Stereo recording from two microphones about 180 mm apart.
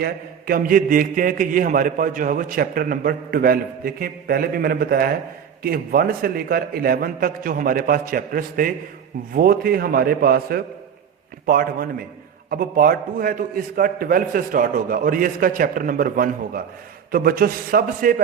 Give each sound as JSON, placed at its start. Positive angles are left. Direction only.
{"t": 0.0, "sound": "a man's voice", "side_deg": -55}